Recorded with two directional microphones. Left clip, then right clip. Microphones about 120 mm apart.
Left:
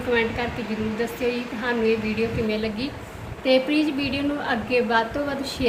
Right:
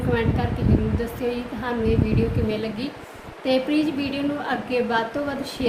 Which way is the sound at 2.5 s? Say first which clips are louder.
Left 1 dB; 15° right (ahead or behind).